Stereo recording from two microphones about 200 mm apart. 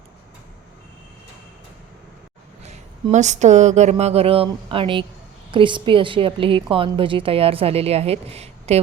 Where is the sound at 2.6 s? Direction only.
35° right (ahead or behind).